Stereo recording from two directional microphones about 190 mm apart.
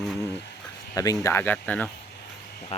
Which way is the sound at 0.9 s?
20° left (ahead or behind).